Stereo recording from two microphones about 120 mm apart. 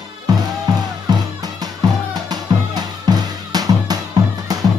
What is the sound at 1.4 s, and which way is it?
Music, 35° right (ahead or behind).